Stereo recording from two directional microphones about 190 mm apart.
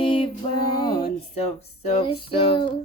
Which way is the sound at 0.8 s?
25° left (ahead or behind).